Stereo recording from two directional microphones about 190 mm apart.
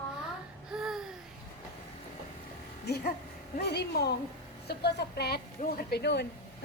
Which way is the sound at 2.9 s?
60° left (ahead or behind).